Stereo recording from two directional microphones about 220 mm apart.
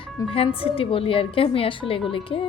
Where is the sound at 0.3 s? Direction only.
25° left (ahead or behind).